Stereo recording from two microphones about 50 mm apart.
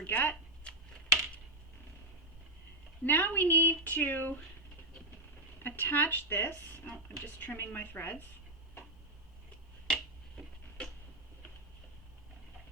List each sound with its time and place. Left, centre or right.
0.0 s speech: left
0.7 s a sound: left
3.0 s speech: left
5.6 s speech: left
6.8 s speech: left
9.8 s finger snapping: centre